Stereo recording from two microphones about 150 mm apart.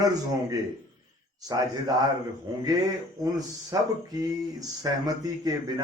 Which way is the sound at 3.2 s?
25° right (ahead or behind).